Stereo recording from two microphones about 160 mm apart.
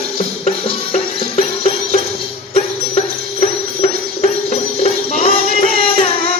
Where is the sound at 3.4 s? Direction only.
40° left (ahead or behind).